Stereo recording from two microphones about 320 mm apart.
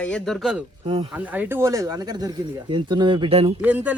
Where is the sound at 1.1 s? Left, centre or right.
Centre.